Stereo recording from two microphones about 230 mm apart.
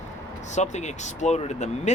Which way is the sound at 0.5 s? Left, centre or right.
Left.